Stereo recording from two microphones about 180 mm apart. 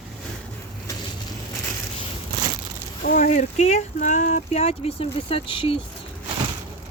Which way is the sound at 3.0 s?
45° left (ahead or behind).